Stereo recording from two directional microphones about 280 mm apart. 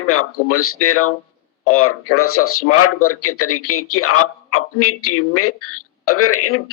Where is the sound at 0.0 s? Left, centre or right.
Left.